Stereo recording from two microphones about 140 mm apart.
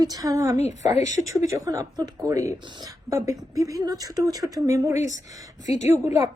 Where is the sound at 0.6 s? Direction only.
55° left (ahead or behind).